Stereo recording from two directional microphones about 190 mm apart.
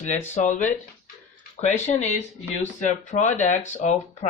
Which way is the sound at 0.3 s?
40° left (ahead or behind).